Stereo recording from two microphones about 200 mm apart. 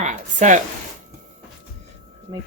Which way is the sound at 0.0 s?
40° right (ahead or behind).